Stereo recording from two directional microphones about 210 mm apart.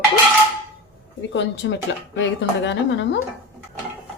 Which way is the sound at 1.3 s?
60° left (ahead or behind).